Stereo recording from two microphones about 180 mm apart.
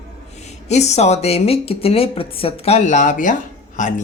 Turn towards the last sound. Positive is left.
turn(degrees=45)  # may be behind; listen again after turning